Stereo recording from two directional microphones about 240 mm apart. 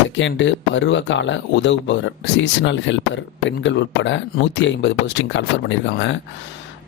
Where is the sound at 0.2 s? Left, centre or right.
Left.